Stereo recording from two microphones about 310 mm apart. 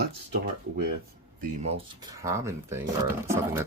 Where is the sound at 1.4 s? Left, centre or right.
Centre.